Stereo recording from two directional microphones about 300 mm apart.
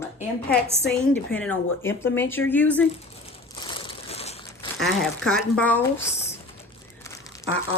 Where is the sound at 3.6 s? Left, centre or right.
Centre.